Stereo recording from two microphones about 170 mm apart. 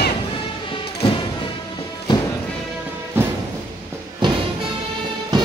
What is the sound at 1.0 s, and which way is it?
Music, 30° left (ahead or behind).